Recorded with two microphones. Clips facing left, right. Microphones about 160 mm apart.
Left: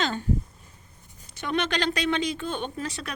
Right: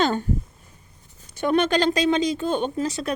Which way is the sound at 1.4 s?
50° right (ahead or behind).